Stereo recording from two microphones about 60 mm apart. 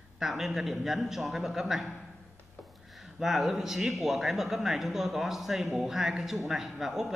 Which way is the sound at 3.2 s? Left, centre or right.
Centre.